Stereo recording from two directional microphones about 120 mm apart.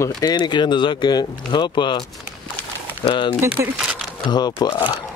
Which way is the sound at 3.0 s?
40° left (ahead or behind).